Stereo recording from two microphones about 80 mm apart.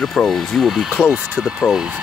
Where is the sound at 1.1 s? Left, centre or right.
Centre.